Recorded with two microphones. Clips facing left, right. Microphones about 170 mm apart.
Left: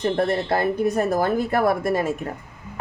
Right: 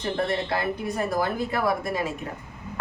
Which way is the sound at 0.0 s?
45° left (ahead or behind).